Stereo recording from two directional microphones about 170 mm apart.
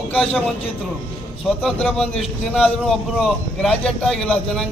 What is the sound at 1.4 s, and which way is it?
A man's voice, 5° left (ahead or behind).